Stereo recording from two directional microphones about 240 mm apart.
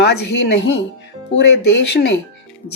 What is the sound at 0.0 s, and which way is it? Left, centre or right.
Speech, left.